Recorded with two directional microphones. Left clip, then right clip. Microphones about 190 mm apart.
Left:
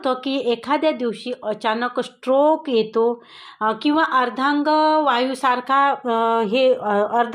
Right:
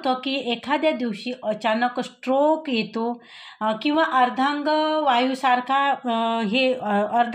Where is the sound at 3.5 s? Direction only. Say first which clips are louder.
Left 3 dB; 35° left (ahead or behind).